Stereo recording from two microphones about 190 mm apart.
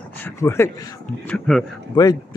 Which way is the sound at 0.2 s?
15° left (ahead or behind).